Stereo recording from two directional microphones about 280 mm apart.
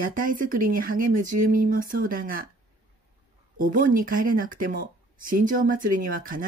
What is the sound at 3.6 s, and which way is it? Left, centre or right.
Speech, right.